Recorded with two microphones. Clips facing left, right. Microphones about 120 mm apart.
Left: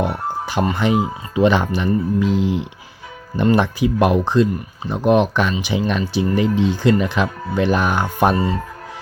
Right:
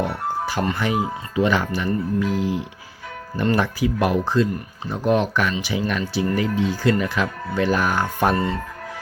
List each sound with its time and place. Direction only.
0.0 s speech: 20° left (ahead or behind)
8.4 s speech: 5° left (ahead or behind)